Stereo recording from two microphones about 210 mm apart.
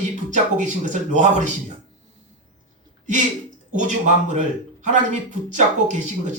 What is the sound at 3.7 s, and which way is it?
Speech, 35° right (ahead or behind).